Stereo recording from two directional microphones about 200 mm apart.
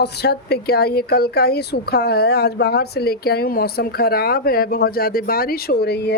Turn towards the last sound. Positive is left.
turn(degrees=55)  # may be behind; listen again after turning